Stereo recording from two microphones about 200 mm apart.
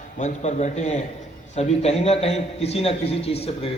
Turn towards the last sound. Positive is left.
turn(degrees=30)  # may be behind; listen again after turning